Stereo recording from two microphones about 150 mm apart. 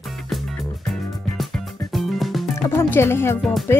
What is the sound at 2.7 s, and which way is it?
Speech, 15° left (ahead or behind).